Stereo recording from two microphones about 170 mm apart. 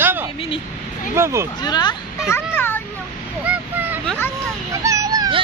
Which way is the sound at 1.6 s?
25° left (ahead or behind).